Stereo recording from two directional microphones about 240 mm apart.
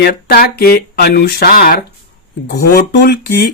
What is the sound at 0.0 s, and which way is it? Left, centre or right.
Speech, left.